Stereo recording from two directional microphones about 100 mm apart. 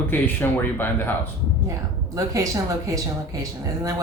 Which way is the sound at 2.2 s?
35° right (ahead or behind).